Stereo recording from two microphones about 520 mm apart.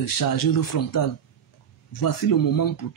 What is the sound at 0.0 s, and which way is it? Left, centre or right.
Speech, left.